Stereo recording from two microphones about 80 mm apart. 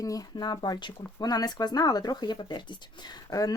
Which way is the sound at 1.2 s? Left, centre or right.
Left.